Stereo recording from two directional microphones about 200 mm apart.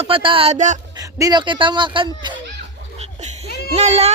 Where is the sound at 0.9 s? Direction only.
15° right (ahead or behind).